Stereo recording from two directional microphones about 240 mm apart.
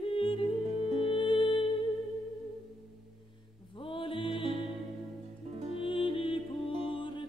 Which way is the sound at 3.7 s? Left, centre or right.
Left.